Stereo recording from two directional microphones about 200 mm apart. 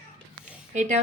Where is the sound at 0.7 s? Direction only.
35° right (ahead or behind).